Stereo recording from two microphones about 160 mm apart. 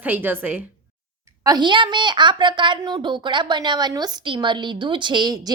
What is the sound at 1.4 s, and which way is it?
A woman's voice, 25° right (ahead or behind).